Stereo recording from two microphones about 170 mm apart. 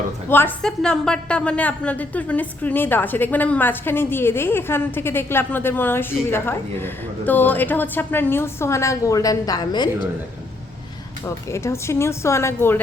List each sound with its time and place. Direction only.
0.3 s a woman's voice: 10° left (ahead or behind)
11.5 s a woman's voice: 15° left (ahead or behind)